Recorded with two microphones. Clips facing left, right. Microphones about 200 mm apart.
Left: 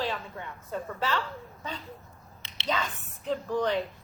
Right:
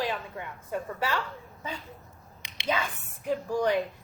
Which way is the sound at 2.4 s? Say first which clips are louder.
Right 1 dB; 10° right (ahead or behind).